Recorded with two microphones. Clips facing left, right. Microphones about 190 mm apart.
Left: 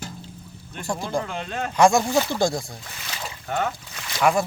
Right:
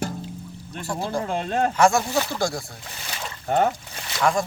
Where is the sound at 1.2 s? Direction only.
40° right (ahead or behind).